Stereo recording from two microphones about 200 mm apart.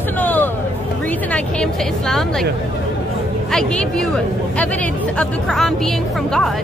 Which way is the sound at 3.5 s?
5° left (ahead or behind).